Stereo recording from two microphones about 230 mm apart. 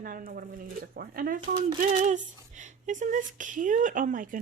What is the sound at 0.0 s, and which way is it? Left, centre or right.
Speech, right.